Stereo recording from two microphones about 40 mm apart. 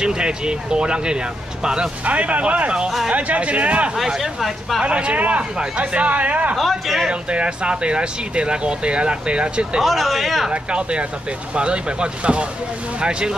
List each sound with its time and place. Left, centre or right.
0.0 s speech: right
2.0 s speech: right
4.2 s speech: centre
4.8 s speech: right
6.5 s speech: centre
7.1 s speech: right
9.8 s speech: centre
10.5 s speech: right